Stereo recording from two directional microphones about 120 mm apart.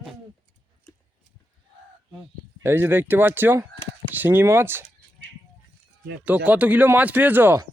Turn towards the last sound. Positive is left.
turn(degrees=-15)  # may be behind; listen again after turning